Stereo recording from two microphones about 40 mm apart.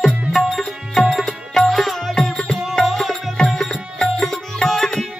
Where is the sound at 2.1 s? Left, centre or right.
Centre.